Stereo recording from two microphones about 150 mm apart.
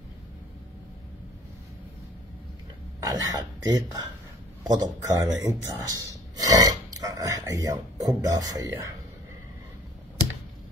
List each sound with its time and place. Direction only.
3.0 s speech: 25° right (ahead or behind)